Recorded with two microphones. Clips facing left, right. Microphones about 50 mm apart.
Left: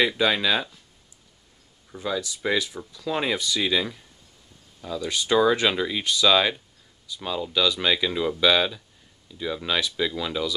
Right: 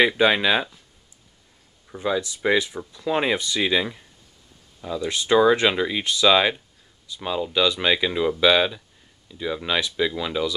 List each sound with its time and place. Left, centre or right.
0.0 s speech: right
1.9 s speech: right